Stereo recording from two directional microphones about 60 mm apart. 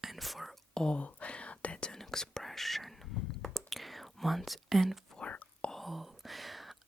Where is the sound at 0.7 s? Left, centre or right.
Centre.